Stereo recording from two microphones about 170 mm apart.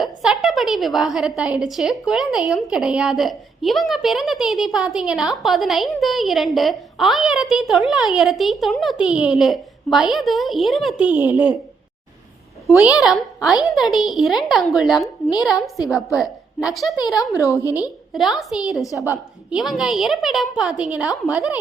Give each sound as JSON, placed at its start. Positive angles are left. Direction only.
{"t": 0.0, "sound": "a woman's voice", "side_deg": -5}
{"t": 12.6, "sound": "a woman's voice", "side_deg": -5}
{"t": 16.1, "sound": "a child's voice", "side_deg": -5}
{"t": 17.4, "sound": "a woman's voice", "side_deg": 15}
{"t": 18.1, "sound": "a woman's voice", "side_deg": 0}
{"t": 18.8, "sound": "a woman's voice", "side_deg": 20}
{"t": 19.0, "sound": "a woman's voice", "side_deg": -10}